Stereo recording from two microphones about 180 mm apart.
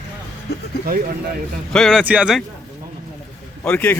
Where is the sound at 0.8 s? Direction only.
55° right (ahead or behind).